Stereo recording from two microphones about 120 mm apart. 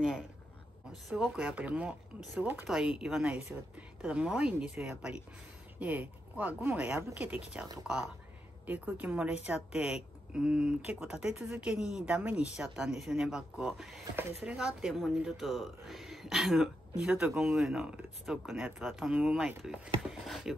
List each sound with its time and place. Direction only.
1.1 s a woman's voice: 5° right (ahead or behind)
2.7 s a woman's voice: 5° right (ahead or behind)